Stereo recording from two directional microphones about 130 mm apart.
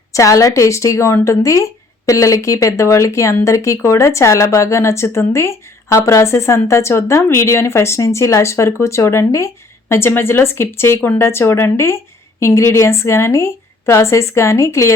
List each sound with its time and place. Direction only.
0.1 s speech: 25° left (ahead or behind)